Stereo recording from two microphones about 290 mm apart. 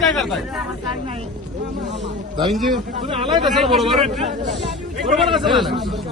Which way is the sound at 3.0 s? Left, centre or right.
Centre.